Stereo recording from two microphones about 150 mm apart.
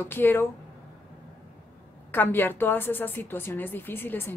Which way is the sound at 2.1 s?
15° left (ahead or behind).